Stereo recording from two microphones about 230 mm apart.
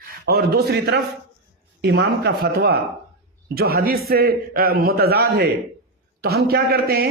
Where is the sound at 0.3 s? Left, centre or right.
Right.